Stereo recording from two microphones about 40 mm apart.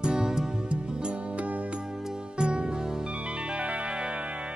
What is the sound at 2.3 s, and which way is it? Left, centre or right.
Music, right.